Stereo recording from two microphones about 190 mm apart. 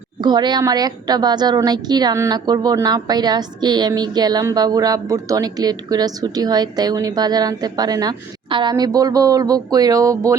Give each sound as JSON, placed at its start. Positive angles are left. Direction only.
{"t": 0.2, "sound": "a woman's voice", "side_deg": -25}